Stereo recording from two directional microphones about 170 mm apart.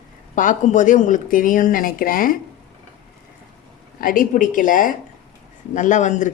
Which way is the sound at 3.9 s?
55° left (ahead or behind).